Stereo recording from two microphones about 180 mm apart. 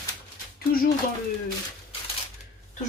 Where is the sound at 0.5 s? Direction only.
55° left (ahead or behind).